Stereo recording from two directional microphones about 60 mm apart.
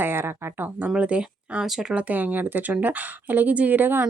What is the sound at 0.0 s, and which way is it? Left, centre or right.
Speech, right.